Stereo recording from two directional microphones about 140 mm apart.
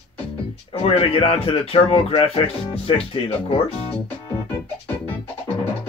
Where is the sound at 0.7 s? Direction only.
45° left (ahead or behind).